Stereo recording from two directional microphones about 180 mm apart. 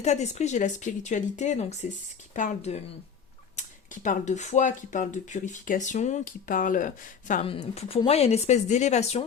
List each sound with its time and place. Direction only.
0.0 s speech: 40° left (ahead or behind)
7.4 s speech: 35° left (ahead or behind)